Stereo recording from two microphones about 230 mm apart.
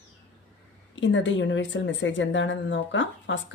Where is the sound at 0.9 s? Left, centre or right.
Left.